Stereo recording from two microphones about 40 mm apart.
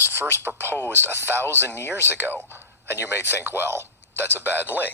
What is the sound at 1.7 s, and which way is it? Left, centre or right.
Speech, left.